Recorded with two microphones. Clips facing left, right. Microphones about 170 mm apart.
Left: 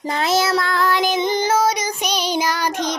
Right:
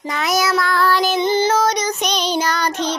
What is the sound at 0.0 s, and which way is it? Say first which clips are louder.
Child singing: left 1 dB; 30° left (ahead or behind).